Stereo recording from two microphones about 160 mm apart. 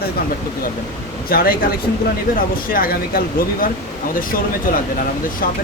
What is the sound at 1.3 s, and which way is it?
Speech, 70° left (ahead or behind).